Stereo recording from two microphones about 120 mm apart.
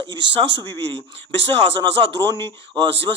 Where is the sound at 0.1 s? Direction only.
40° right (ahead or behind).